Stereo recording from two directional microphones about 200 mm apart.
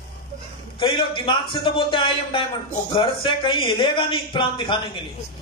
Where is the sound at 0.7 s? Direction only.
25° left (ahead or behind).